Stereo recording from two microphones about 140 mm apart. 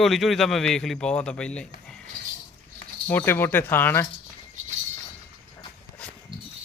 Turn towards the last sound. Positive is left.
turn(degrees=10)  # may be behind; listen again after turning